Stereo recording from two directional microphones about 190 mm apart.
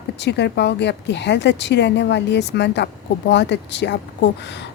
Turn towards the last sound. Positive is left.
turn(degrees=65)  # may be behind; listen again after turning